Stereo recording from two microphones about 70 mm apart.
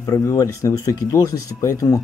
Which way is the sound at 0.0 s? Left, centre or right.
Left.